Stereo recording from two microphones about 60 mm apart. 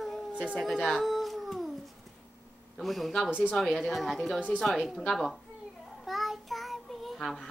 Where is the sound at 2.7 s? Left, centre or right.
Centre.